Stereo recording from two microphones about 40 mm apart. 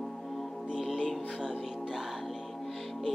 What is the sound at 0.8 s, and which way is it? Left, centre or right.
Music, centre.